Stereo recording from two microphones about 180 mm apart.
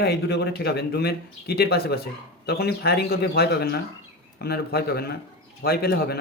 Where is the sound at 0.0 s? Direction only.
65° left (ahead or behind).